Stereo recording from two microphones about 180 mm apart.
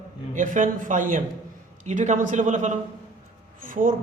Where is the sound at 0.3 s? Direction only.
45° right (ahead or behind).